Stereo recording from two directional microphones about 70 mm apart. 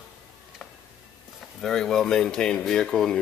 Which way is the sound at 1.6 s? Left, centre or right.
Centre.